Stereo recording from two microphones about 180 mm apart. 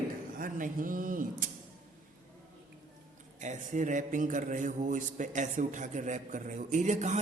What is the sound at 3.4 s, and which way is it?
A man's voice, 40° right (ahead or behind).